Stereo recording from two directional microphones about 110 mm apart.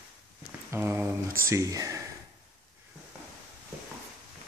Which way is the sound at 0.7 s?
25° right (ahead or behind).